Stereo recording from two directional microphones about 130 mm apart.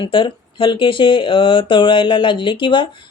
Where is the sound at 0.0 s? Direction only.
40° left (ahead or behind).